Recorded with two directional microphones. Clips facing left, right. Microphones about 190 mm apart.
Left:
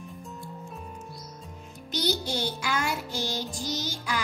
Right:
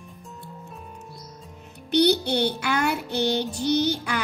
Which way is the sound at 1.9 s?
65° right (ahead or behind).